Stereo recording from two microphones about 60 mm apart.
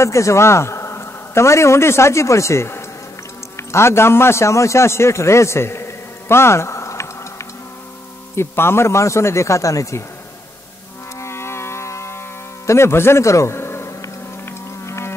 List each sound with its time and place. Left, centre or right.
0.0 s a man's voice: left
8.4 s speech: left
11.1 s insect: left
12.6 s speech: left
14.4 s music: left